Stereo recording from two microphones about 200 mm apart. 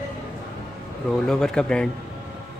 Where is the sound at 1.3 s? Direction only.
5° left (ahead or behind).